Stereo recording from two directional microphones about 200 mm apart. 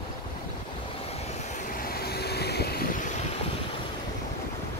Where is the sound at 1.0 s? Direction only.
30° left (ahead or behind); by 3.0 s 50° left (ahead or behind).